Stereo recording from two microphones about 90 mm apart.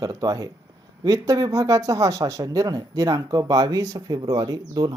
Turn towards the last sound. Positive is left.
turn(degrees=-45)  # may be behind; listen again after turning